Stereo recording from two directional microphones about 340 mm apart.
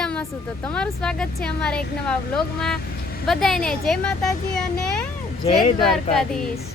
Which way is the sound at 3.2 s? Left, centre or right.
Centre.